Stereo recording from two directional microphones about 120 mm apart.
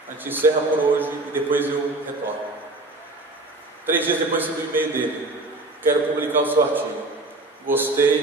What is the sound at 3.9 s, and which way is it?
A man's voice, 15° right (ahead or behind).